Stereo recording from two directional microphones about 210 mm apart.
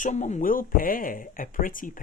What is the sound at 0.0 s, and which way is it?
Speech, 35° left (ahead or behind).